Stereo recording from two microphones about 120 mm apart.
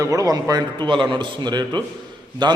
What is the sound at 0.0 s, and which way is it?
A man's voice, 30° right (ahead or behind).